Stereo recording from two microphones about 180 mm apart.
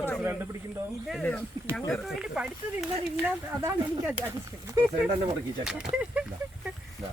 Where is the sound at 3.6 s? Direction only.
15° right (ahead or behind).